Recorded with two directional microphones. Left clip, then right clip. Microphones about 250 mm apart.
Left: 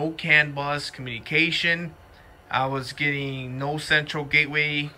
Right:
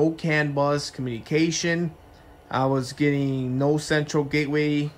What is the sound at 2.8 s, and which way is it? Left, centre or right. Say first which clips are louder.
Speech: right 2 dB; right.